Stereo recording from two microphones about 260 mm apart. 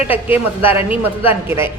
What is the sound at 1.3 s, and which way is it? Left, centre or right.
Speech, centre.